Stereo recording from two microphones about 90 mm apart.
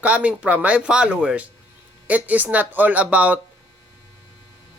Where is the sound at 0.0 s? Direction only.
15° right (ahead or behind).